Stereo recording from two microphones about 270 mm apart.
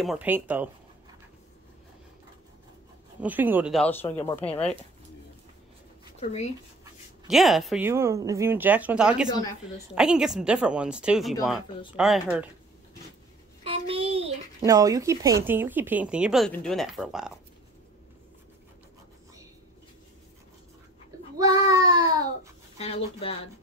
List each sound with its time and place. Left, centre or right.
0.0 s speech: centre
3.2 s speech: centre
4.1 s speech: left
6.1 s speech: left
6.8 s speech: centre
13.7 s child singing: right
14.6 s speech: centre
21.4 s child singing: centre
22.8 s speech: left